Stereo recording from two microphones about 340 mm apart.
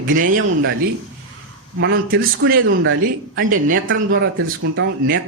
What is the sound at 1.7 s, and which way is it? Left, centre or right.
Speech, right.